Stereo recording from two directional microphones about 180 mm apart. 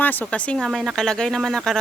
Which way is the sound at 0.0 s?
10° left (ahead or behind).